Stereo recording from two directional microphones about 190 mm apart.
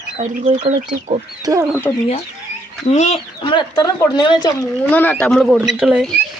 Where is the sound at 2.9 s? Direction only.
35° left (ahead or behind).